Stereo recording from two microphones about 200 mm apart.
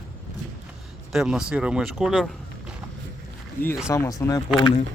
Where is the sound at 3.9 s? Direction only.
15° left (ahead or behind).